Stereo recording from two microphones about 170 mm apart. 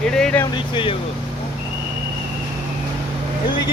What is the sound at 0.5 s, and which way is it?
Speech, 30° left (ahead or behind).